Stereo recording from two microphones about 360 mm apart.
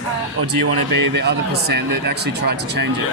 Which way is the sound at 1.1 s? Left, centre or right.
Right.